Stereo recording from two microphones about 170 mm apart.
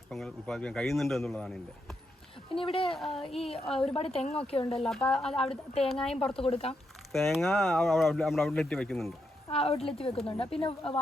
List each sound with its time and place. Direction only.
0.1 s speech: centre (ahead or behind)
2.6 s speech: 35° left (ahead or behind)
3.7 s speech: 5° left (ahead or behind)
3.9 s speech: 35° left (ahead or behind)
4.8 s speech: 5° left (ahead or behind)
5.5 s speech: 35° left (ahead or behind)
7.1 s speech: centre (ahead or behind)
9.5 s speech: 35° left (ahead or behind)